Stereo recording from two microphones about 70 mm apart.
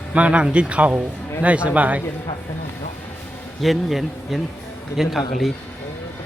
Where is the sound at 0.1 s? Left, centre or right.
Centre.